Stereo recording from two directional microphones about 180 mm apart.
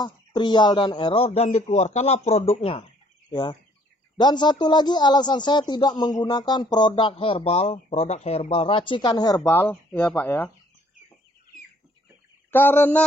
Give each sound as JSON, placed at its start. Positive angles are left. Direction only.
{"t": 0.0, "sound": "speech", "side_deg": 25}
{"t": 12.4, "sound": "speech", "side_deg": 10}